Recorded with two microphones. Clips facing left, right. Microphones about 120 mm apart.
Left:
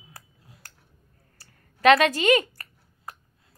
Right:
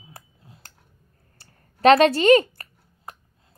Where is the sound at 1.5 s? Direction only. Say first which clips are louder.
Right 3 dB; 35° right (ahead or behind).